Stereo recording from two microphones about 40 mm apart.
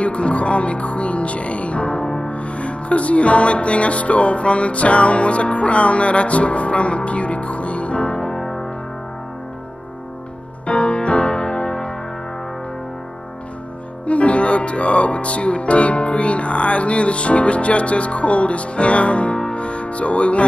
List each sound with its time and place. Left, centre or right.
0.0 s music: left
8.4 s music: centre
10.7 s music: left
14.0 s music: left